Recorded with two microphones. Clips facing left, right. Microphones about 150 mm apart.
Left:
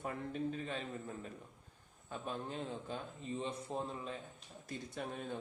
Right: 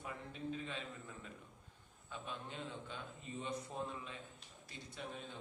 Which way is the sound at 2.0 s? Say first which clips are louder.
Left 6 dB; 40° left (ahead or behind).